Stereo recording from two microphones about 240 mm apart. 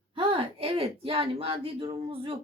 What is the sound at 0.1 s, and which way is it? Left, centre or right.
A woman's voice, right.